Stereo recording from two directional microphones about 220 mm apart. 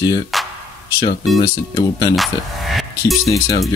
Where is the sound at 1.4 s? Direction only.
15° left (ahead or behind).